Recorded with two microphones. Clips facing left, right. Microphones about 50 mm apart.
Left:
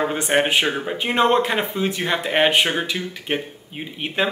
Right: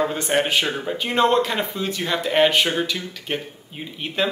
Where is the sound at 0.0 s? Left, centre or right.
Left.